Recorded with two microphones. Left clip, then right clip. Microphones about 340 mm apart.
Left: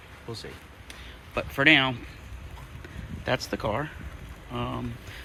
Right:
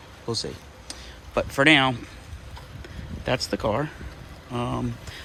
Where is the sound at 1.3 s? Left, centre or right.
Centre.